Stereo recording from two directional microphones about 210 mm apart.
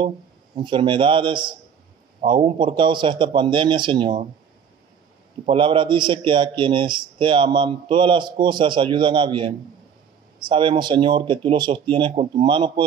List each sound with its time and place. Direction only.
0.6 s a man's voice: 25° right (ahead or behind)
5.4 s a man's voice: 25° right (ahead or behind)